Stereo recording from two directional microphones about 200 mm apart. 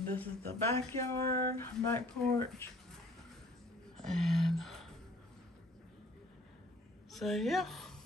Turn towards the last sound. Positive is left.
turn(degrees=0)  # may be behind; listen again after turning